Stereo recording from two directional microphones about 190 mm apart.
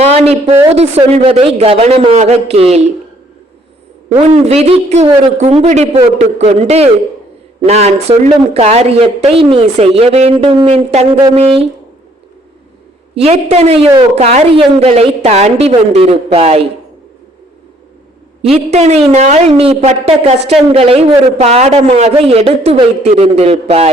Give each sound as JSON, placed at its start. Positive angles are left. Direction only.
{"t": 0.0, "sound": "a sound", "side_deg": -35}
{"t": 0.8, "sound": "a woman's voice", "side_deg": -35}
{"t": 4.3, "sound": "a woman's voice", "side_deg": -35}
{"t": 13.1, "sound": "a woman's voice", "side_deg": -35}
{"t": 18.4, "sound": "a woman's voice", "side_deg": -35}